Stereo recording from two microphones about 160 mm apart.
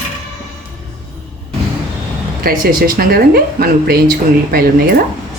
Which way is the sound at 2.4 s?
65° right (ahead or behind).